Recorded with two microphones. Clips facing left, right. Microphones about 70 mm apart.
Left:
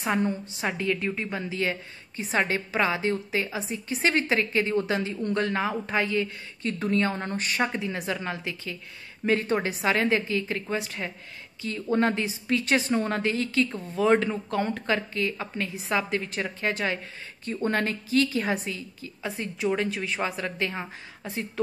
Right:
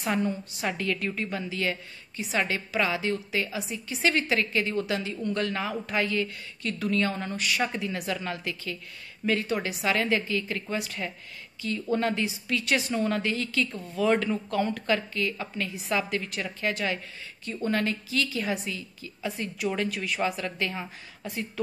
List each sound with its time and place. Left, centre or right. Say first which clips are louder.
0.0 s a woman's voice: left 2 dB; left